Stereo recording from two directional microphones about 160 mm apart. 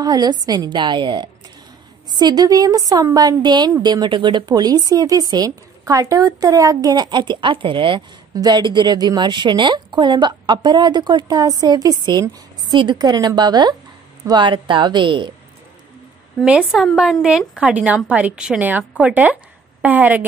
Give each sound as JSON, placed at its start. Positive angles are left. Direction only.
{"t": 0.0, "sound": "speech", "side_deg": -25}
{"t": 16.3, "sound": "a woman's voice", "side_deg": -5}